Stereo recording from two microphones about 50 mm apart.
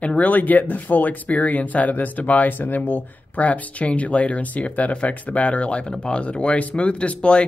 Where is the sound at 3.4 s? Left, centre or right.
Left.